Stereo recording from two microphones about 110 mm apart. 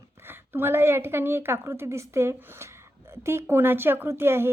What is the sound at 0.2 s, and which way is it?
A woman's voice, 20° right (ahead or behind).